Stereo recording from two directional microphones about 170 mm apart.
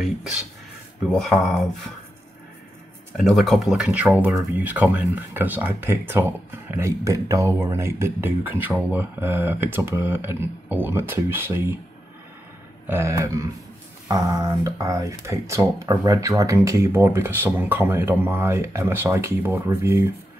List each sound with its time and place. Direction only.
0.0 s speech: 5° right (ahead or behind)
3.2 s speech: centre (ahead or behind)
12.8 s speech: 15° right (ahead or behind)